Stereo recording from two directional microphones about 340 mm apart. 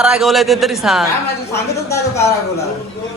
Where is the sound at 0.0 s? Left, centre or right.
Centre.